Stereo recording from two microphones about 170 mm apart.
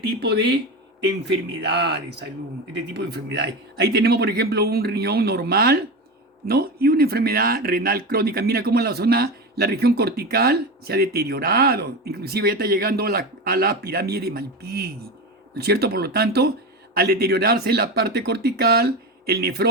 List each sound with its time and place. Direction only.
0.2 s a man's voice: 75° right (ahead or behind)